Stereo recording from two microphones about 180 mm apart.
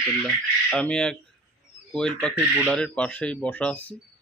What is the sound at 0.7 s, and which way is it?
A man's voice, 5° left (ahead or behind).